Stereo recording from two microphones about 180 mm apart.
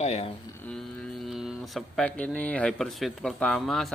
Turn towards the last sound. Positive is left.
turn(degrees=0)  # may be behind; listen again after turning